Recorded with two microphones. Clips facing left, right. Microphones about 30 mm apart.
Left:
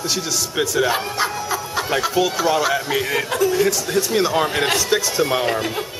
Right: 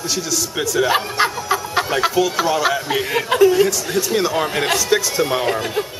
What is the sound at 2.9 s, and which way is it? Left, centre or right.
Speech, centre.